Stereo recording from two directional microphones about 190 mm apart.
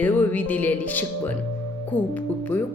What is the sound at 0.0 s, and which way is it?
A woman's voice, 10° left (ahead or behind).